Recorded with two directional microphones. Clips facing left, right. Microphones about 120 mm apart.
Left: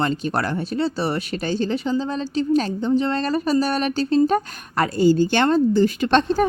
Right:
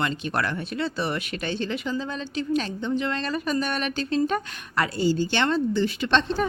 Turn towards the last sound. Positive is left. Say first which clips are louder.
# left 5 dB
turn(degrees=45)  # may be behind; listen again after turning